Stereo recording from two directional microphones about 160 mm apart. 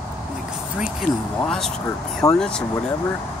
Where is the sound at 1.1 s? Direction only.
60° left (ahead or behind).